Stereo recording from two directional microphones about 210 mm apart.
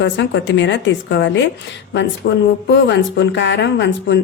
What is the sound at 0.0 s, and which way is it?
Speech, 60° left (ahead or behind).